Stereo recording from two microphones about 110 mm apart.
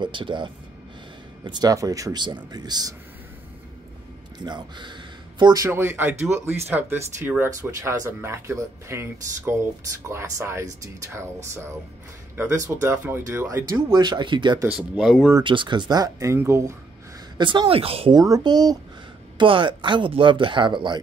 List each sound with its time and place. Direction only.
0.0 s speech: 50° right (ahead or behind); by 2.2 s 30° right (ahead or behind)
2.2 s speech: 40° right (ahead or behind)
4.5 s speech: 45° right (ahead or behind)
5.7 s speech: 20° right (ahead or behind)
12.4 s speech: 30° right (ahead or behind)
13.9 s speech: 40° right (ahead or behind)
14.7 s speech: 5° right (ahead or behind)
15.4 s speech: 45° right (ahead or behind); by 16.7 s 25° right (ahead or behind)
17.4 s speech: 45° right (ahead or behind)
18.1 s speech: 35° right (ahead or behind)